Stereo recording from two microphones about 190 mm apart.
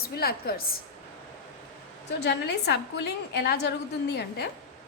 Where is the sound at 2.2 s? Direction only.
60° left (ahead or behind).